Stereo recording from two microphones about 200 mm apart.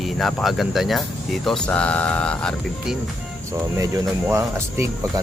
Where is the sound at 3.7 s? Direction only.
15° right (ahead or behind).